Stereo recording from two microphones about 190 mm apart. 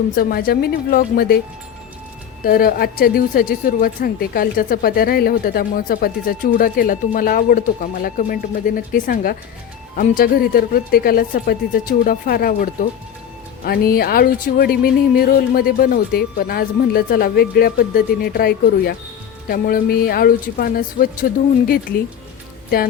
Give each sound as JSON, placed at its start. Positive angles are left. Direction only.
{"t": 0.2, "sound": "a woman's voice", "side_deg": 50}
{"t": 2.4, "sound": "a woman's voice", "side_deg": 50}